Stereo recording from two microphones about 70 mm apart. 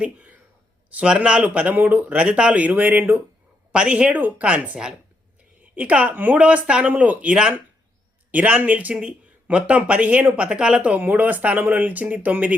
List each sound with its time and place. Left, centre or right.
0.0 s a woman's voice: centre